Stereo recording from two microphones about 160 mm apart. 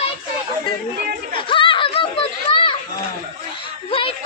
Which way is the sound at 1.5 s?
30° left (ahead or behind).